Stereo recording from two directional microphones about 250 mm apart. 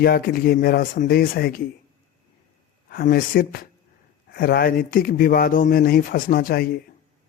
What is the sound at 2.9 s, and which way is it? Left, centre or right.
Speech, left.